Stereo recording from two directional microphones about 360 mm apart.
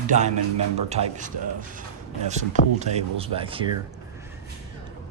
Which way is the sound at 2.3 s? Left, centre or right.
Centre.